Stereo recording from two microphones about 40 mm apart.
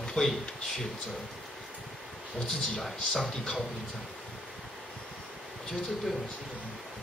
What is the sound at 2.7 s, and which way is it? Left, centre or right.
Speech, centre.